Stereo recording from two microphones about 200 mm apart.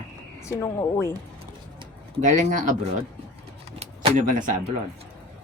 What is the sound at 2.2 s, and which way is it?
Speech, 40° right (ahead or behind).